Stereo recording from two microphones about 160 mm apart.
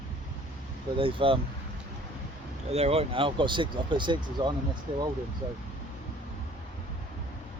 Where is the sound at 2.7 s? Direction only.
40° right (ahead or behind).